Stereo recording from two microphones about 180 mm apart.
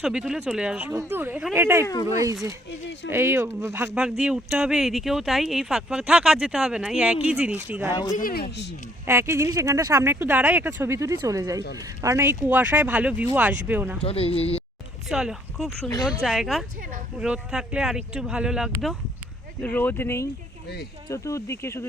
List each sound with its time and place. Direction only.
0.0 s speech: 5° right (ahead or behind)
1.8 s speech: 20° left (ahead or behind)
2.6 s speech: 80° left
3.1 s speech: 15° right (ahead or behind)
8.1 s speech: 55° left (ahead or behind)
9.0 s speech: 15° right (ahead or behind)
14.0 s speech: 35° left (ahead or behind)
15.1 s speech: 5° right (ahead or behind)
19.6 s speech: 10° left (ahead or behind)